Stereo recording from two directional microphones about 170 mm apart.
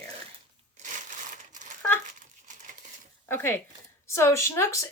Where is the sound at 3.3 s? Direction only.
15° left (ahead or behind).